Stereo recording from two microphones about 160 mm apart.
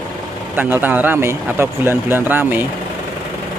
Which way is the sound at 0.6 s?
10° right (ahead or behind).